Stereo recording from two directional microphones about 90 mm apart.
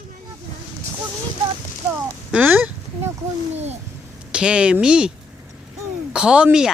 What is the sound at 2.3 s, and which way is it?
Speech, 15° right (ahead or behind).